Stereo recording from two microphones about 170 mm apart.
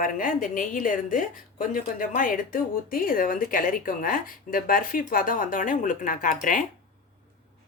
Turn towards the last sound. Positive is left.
turn(degrees=50)  # may be behind; listen again after turning